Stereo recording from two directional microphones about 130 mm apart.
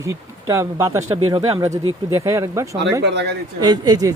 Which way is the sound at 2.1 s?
20° right (ahead or behind).